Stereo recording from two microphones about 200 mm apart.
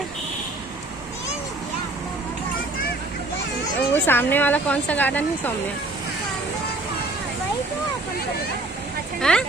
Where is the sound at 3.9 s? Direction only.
10° left (ahead or behind).